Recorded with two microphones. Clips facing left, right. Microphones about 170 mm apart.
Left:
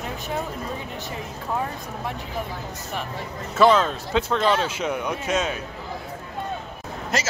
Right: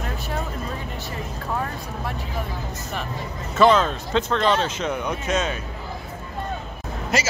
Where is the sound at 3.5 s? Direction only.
5° left (ahead or behind).